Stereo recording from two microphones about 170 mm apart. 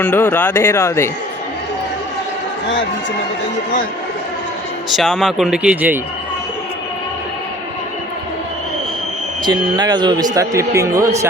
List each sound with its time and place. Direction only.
0.0 s speech: 10° left (ahead or behind)
4.9 s a man's voice: centre (ahead or behind)
9.4 s speech: 25° right (ahead or behind)